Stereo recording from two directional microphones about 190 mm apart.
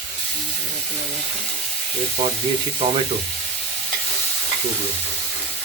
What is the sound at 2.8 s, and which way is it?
Frying, 30° right (ahead or behind).